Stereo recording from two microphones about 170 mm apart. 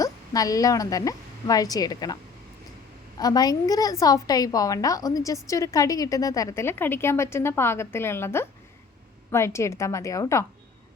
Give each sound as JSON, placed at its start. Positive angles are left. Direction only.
{"t": 0.0, "sound": "a woman's voice", "side_deg": 20}
{"t": 3.2, "sound": "a woman's voice", "side_deg": 25}